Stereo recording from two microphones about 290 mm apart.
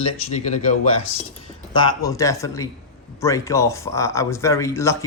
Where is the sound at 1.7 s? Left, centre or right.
Centre.